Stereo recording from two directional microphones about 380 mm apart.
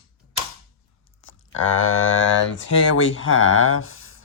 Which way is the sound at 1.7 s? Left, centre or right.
Left.